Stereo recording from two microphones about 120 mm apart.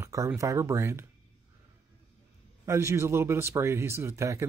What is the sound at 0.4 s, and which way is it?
Speech, 25° right (ahead or behind).